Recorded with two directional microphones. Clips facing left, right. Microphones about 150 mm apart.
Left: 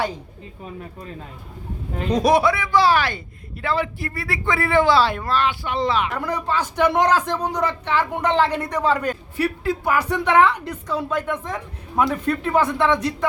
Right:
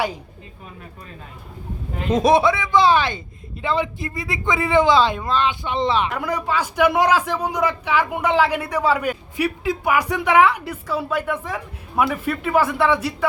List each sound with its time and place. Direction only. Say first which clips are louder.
2.0 s a man's voice: right 1 dB; 25° right (ahead or behind)
6.1 s speech: right 1 dB; 10° right (ahead or behind)